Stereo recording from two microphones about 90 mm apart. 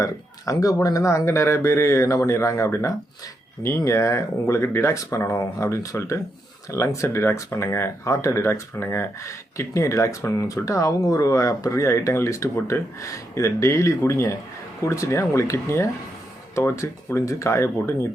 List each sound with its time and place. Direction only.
0.0 s speech: 40° left (ahead or behind)